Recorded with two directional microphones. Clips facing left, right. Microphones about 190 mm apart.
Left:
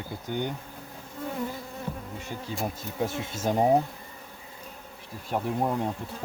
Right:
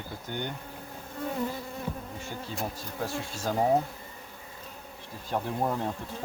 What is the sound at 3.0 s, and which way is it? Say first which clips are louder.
Speech: left 4 dB; 20° left (ahead or behind).